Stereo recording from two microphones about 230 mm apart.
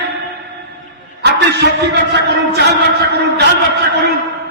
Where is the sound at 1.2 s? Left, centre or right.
Right.